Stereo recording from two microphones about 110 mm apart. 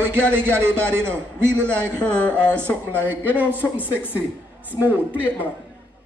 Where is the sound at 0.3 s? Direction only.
25° right (ahead or behind).